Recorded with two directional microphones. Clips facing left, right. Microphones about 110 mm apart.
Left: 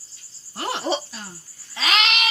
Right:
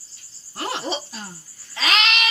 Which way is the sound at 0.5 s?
20° left (ahead or behind).